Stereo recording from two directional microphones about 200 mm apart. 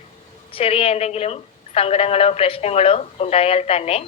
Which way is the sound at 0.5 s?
30° left (ahead or behind).